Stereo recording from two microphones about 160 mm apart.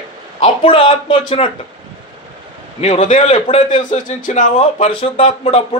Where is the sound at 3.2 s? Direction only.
35° left (ahead or behind).